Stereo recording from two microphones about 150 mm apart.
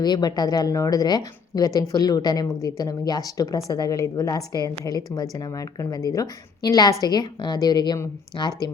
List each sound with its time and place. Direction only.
0.0 s a woman's voice: 25° left (ahead or behind)